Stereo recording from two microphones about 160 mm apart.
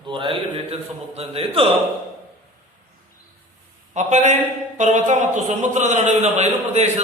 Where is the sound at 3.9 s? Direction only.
45° right (ahead or behind).